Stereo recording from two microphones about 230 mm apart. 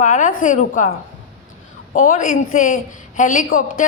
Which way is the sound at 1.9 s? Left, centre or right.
Left.